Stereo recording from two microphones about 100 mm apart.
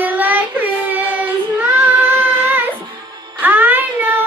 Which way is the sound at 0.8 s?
15° right (ahead or behind).